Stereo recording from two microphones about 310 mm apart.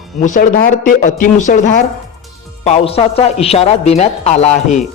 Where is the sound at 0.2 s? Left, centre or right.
Left.